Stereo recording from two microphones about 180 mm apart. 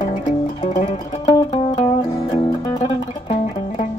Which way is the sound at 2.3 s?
25° left (ahead or behind).